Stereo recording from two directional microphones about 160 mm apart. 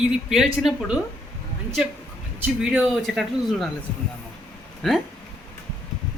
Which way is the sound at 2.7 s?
5° right (ahead or behind).